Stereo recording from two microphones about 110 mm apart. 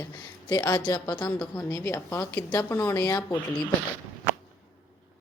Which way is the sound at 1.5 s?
25° left (ahead or behind).